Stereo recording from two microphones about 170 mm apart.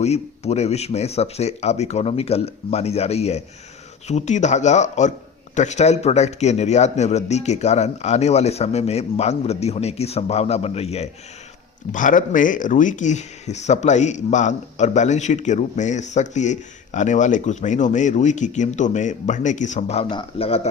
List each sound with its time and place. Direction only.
0.0 s a man's voice: 40° left (ahead or behind)
11.9 s speech: 50° left (ahead or behind); by 20.6 s 35° left (ahead or behind)